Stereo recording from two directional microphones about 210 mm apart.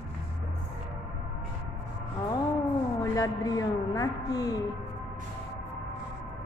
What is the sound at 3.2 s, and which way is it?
A man's voice, 15° left (ahead or behind).